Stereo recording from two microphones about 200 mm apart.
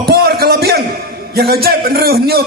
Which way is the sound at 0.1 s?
50° right (ahead or behind).